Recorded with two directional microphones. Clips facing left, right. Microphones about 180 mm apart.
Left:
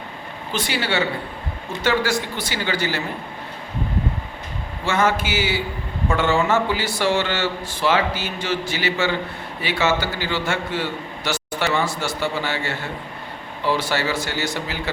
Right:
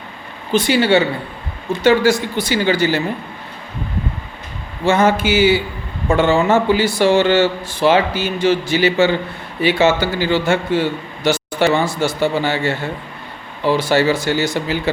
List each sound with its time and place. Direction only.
0.5 s speech: 20° right (ahead or behind)
4.9 s speech: 20° right (ahead or behind)